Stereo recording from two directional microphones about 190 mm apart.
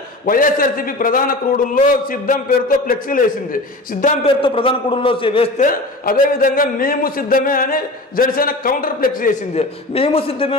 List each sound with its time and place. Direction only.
0.2 s a man's voice: 45° left (ahead or behind)
4.2 s a man's voice: 30° left (ahead or behind)
5.6 s a man's voice: 50° left (ahead or behind)
9.6 s a man's voice: 30° left (ahead or behind)